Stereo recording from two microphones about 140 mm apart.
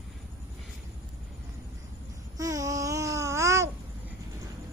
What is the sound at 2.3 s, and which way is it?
Babbling, 25° right (ahead or behind).